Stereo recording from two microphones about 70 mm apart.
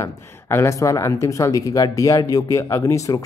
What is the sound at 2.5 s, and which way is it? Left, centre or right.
Speech, left.